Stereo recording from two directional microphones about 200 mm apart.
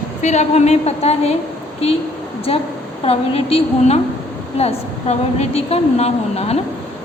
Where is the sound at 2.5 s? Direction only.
30° left (ahead or behind).